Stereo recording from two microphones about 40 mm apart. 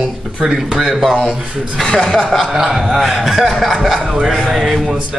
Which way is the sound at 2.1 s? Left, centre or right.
Centre.